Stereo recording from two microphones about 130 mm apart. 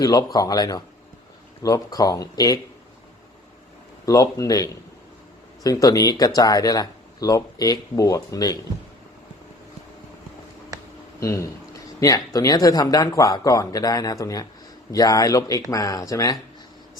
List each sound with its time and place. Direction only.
0.0 s speech: 30° left (ahead or behind)
4.0 s speech: 25° left (ahead or behind)
11.2 s speech: 25° left (ahead or behind)